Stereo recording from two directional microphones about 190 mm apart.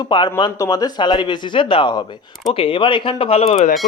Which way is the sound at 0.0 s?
25° left (ahead or behind).